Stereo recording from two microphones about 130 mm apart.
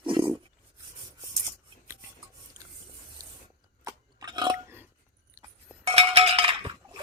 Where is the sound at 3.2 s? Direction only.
30° right (ahead or behind).